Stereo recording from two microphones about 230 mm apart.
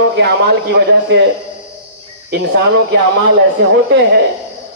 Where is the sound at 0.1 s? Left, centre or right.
Right.